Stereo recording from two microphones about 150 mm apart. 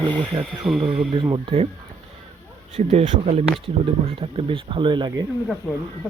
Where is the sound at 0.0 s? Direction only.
10° left (ahead or behind).